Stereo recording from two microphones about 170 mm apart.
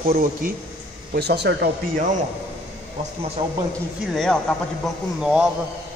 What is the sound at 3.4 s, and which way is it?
Speech, 20° right (ahead or behind).